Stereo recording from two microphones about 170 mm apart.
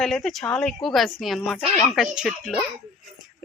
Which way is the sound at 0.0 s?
Centre (ahead or behind).